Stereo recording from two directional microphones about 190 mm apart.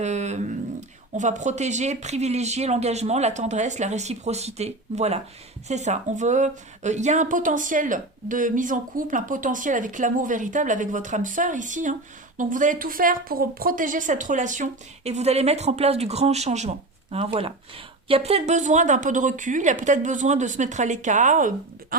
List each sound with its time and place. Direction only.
0.0 s speech: 40° right (ahead or behind)